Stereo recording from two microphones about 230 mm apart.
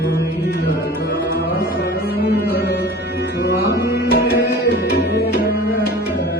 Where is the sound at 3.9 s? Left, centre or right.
Left.